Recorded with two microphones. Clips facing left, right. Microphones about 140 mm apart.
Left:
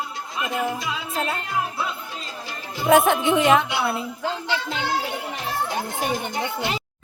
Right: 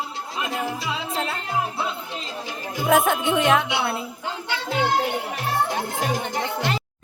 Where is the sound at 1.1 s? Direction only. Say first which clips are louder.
Left 3 dB; centre (ahead or behind).